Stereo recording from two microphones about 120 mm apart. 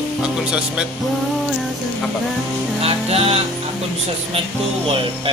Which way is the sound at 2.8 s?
55° right (ahead or behind).